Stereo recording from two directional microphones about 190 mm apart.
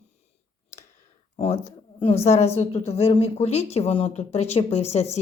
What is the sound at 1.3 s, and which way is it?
Speech, 30° left (ahead or behind).